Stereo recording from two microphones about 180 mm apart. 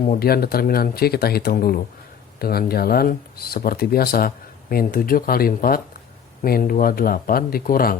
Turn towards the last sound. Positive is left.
turn(degrees=55)  # may be behind; listen again after turning